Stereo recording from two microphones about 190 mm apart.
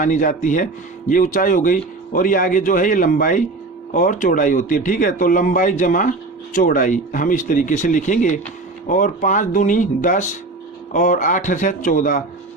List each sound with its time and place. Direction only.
0.0 s speech: 45° left (ahead or behind)